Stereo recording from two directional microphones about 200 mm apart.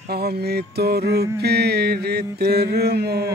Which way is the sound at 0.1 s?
50° right (ahead or behind).